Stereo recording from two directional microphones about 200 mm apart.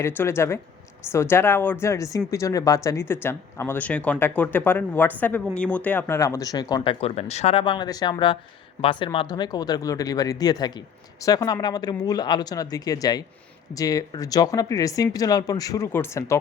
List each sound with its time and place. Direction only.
0.0 s speech: 10° left (ahead or behind)